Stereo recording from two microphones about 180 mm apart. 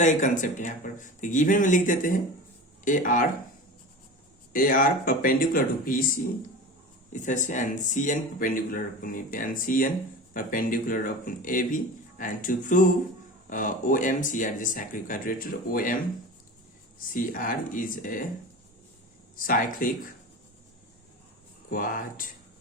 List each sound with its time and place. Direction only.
0.0 s speech: 45° left (ahead or behind)
4.5 s speech: 50° left (ahead or behind)
7.1 s speech: 45° left (ahead or behind)
17.0 s speech: 50° left (ahead or behind)
19.4 s speech: 50° left (ahead or behind)
21.7 s speech: 50° left (ahead or behind)